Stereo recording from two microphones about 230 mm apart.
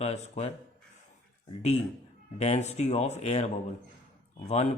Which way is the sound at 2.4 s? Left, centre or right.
Left.